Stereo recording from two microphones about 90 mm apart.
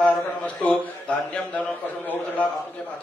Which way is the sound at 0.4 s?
15° left (ahead or behind).